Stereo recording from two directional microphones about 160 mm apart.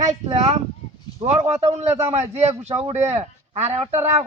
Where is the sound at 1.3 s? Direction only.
40° right (ahead or behind).